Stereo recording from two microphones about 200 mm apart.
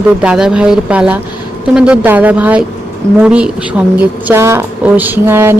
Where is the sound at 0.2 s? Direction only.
5° right (ahead or behind).